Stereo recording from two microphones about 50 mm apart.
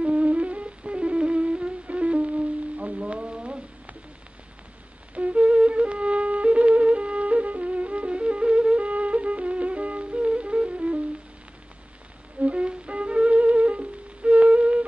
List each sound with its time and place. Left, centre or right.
0.0 s music: right
5.1 s flute: right
12.4 s music: right